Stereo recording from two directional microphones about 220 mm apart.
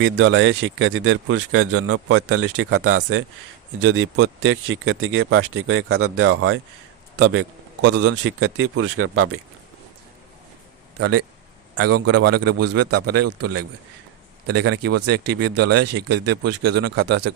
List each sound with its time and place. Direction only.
0.0 s speech: 60° right (ahead or behind); by 6.6 s 75° right (ahead or behind)
7.2 s a sound: 75° right (ahead or behind)
8.0 s speech: 75° right (ahead or behind)
11.8 s a man's voice: 90° right
14.4 s speech: 50° right (ahead or behind)